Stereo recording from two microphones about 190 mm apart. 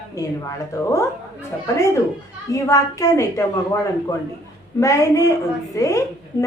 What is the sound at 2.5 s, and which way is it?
Speech, 15° left (ahead or behind).